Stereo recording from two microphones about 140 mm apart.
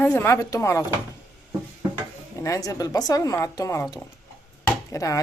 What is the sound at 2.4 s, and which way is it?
A woman's voice, 25° left (ahead or behind).